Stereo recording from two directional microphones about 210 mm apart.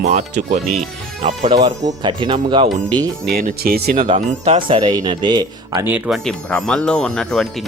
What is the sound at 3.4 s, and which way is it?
Speech, 45° right (ahead or behind).